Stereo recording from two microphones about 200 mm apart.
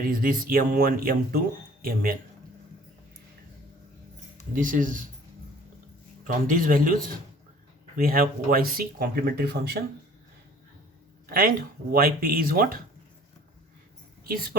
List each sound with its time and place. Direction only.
0.0 s speech: 45° right (ahead or behind)
4.5 s speech: 40° right (ahead or behind)
6.2 s speech: 45° right (ahead or behind)
11.3 s speech: 45° right (ahead or behind)
14.3 s speech: 45° right (ahead or behind)